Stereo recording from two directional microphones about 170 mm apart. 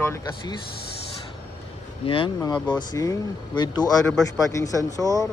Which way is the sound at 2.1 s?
30° left (ahead or behind).